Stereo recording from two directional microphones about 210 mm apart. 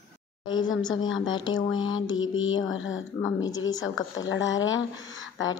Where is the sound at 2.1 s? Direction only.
70° left (ahead or behind).